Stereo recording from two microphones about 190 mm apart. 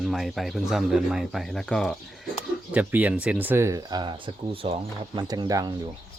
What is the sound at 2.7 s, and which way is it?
Speech, 10° right (ahead or behind).